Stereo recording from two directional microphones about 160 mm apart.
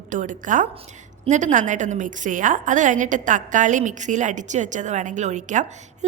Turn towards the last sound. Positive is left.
turn(degrees=-50)  # may be behind; listen again after turning